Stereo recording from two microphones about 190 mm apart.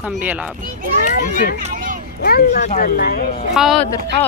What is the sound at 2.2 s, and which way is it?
Speech, 55° left (ahead or behind).